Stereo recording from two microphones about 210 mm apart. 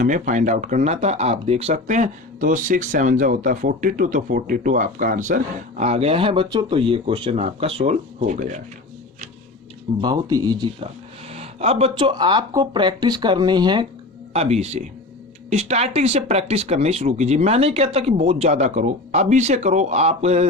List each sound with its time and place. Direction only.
0.0 s speech: 40° right (ahead or behind)
10.0 s speech: 20° right (ahead or behind)